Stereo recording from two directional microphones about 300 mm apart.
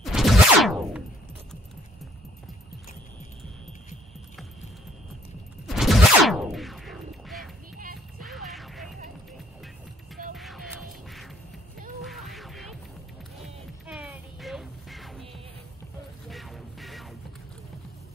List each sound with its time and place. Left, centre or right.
0.0 s a sound: centre
5.7 s a sound: centre
7.7 s music: right
8.2 s music: centre
10.3 s hum: centre
12.0 s music: centre
16.3 s music: centre